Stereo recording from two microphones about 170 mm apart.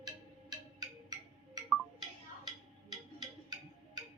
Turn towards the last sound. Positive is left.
turn(degrees=-25)  # may be behind; listen again after turning